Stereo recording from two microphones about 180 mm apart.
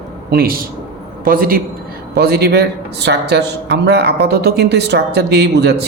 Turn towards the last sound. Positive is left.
turn(degrees=-65)  # may be behind; listen again after turning